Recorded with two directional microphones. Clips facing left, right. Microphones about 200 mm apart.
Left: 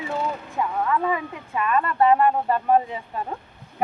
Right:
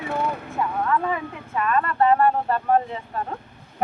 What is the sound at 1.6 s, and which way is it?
Speech, 10° left (ahead or behind).